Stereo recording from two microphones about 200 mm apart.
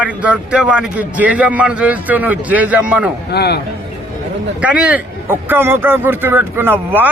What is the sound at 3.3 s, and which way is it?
Speech, 55° left (ahead or behind).